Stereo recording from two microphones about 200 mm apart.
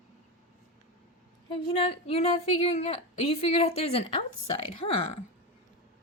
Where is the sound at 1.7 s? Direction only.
30° left (ahead or behind).